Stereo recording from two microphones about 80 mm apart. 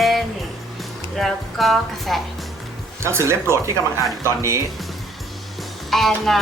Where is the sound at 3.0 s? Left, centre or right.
Right.